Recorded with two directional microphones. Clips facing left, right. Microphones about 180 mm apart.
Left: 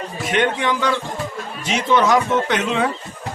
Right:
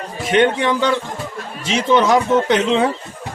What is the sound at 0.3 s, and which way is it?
Speech, 30° right (ahead or behind).